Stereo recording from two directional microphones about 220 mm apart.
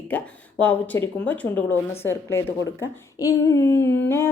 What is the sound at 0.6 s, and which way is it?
Speech, 10° left (ahead or behind).